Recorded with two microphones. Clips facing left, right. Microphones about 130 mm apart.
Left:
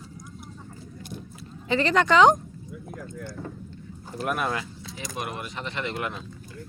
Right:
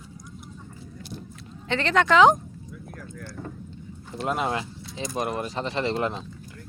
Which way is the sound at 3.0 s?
Centre (ahead or behind).